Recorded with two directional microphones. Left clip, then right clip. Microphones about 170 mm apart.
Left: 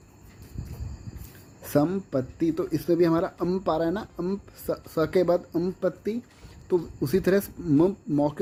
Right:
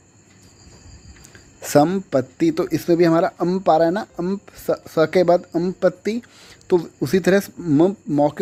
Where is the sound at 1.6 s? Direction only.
45° right (ahead or behind).